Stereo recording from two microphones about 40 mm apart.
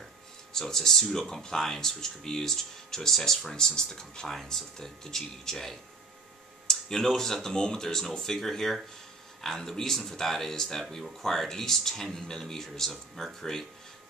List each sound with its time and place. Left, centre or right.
0.5 s speech: centre
4.3 s speech: centre